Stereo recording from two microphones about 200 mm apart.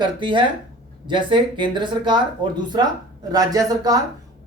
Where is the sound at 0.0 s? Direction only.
25° right (ahead or behind).